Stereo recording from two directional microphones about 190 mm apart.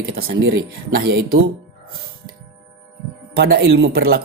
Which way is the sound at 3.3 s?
55° right (ahead or behind).